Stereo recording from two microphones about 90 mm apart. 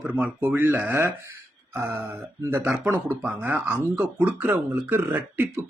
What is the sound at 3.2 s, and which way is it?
Speech, 20° right (ahead or behind).